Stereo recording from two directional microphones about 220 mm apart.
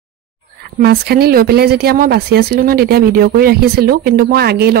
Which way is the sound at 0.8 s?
45° right (ahead or behind).